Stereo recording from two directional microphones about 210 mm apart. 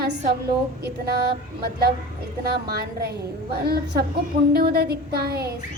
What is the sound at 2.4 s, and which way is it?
A woman's voice, 50° right (ahead or behind).